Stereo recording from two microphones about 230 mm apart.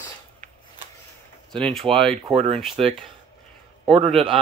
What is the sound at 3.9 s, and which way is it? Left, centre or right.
Speech, right.